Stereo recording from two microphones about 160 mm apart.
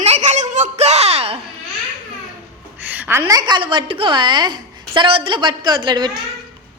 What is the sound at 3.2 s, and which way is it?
A woman's voice, 25° right (ahead or behind).